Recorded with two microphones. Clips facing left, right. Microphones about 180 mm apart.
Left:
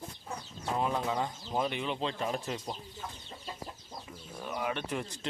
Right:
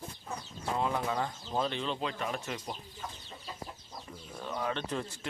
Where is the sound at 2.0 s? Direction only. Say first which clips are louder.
Left 2 dB; 30° left (ahead or behind).